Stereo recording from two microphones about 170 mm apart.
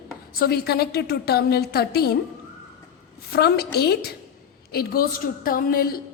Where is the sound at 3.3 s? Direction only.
65° left (ahead or behind).